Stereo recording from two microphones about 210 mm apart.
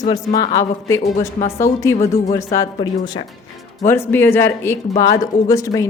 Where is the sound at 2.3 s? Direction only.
15° left (ahead or behind).